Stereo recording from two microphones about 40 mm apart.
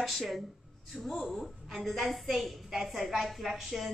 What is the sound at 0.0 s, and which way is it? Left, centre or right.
A woman's voice, centre.